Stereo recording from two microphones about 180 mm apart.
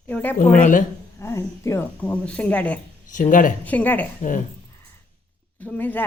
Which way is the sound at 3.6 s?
10° left (ahead or behind).